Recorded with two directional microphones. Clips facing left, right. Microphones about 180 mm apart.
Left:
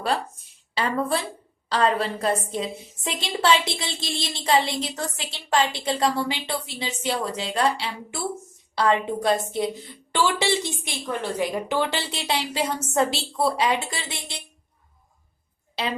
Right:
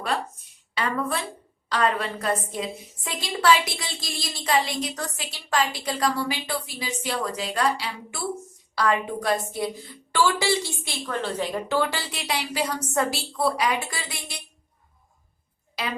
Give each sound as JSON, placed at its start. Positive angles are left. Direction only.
{"t": 0.7, "sound": "a woman's voice", "side_deg": 30}
{"t": 15.8, "sound": "a woman's voice", "side_deg": 25}